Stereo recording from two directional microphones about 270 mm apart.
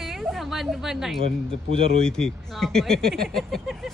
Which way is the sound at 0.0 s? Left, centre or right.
Centre.